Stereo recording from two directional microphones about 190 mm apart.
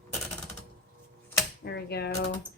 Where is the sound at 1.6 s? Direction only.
60° left (ahead or behind).